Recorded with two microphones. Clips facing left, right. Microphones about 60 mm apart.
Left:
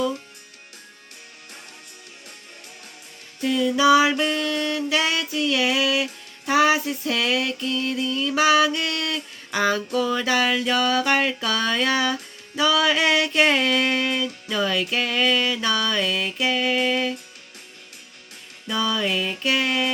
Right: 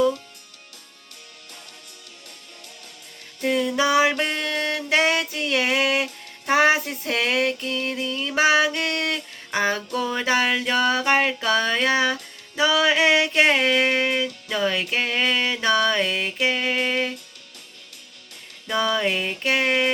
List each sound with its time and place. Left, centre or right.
3.4 s music: right
4.2 s mantra: right
4.9 s music: right
9.6 s a sound: right
18.7 s music: right